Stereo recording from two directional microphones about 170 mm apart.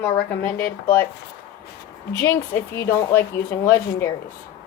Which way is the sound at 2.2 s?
15° left (ahead or behind).